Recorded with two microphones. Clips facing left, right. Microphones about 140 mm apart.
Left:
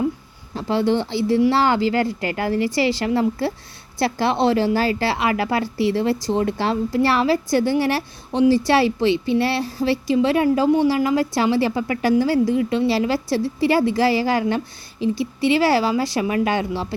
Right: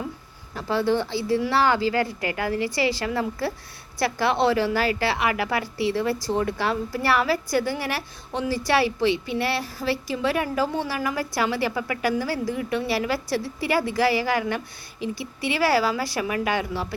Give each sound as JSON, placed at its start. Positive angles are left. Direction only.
{"t": 0.5, "sound": "a woman's voice", "side_deg": 25}